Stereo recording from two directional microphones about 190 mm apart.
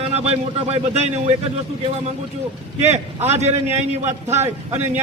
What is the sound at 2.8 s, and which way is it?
Speech, 35° right (ahead or behind).